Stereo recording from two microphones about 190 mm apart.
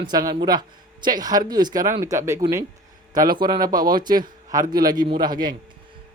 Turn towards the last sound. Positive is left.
turn(degrees=-20)  # may be behind; listen again after turning